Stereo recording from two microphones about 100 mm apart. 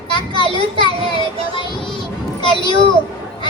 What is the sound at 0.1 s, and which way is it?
A child's voice, 50° left (ahead or behind).